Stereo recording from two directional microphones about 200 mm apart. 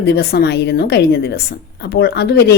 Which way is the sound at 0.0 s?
55° left (ahead or behind).